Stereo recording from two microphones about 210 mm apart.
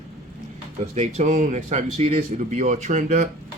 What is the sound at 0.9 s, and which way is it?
Speech, 30° right (ahead or behind).